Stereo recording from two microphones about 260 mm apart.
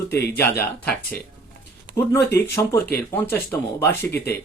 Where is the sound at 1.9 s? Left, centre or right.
Right.